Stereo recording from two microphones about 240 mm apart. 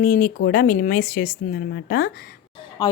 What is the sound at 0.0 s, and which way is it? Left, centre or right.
Speech, left.